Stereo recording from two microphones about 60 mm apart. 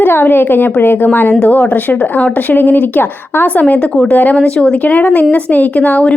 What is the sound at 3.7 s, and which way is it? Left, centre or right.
Speech, centre.